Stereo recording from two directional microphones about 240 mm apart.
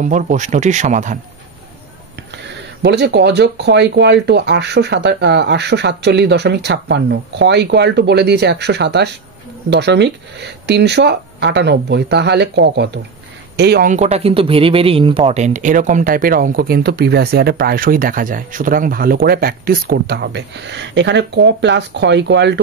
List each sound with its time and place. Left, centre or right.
0.0 s speech: right
2.5 s speech: right